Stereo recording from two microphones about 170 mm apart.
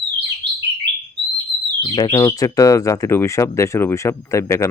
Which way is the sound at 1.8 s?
25° left (ahead or behind).